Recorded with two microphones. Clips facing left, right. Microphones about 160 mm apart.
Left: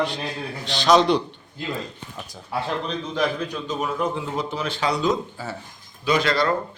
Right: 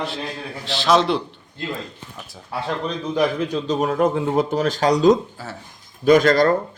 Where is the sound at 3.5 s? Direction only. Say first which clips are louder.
Right 6 dB; 35° right (ahead or behind).